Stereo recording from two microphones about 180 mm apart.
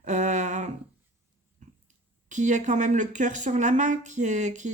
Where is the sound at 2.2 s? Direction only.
45° right (ahead or behind).